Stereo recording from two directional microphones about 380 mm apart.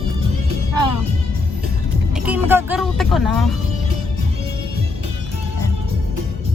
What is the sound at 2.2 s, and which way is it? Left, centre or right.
Speech, centre.